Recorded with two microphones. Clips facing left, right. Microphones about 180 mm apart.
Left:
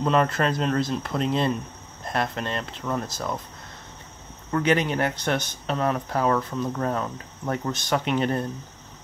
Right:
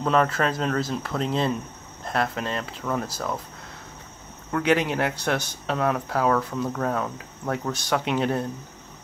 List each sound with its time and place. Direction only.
0.0 s speech: centre (ahead or behind)
4.5 s speech: 5° right (ahead or behind)